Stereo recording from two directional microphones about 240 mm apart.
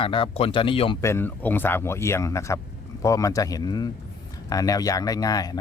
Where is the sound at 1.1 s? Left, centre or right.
Centre.